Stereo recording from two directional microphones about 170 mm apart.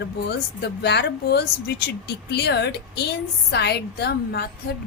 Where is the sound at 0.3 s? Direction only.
80° left.